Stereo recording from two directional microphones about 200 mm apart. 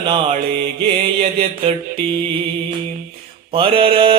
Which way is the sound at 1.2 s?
30° right (ahead or behind).